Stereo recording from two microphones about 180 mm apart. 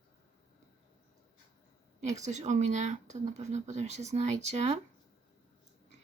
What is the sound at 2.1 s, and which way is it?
Speech, 40° right (ahead or behind).